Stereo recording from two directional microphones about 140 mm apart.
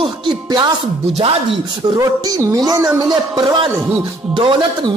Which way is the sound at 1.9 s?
25° right (ahead or behind).